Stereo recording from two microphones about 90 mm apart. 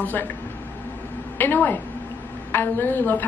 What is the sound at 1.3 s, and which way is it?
A woman's voice, 25° left (ahead or behind).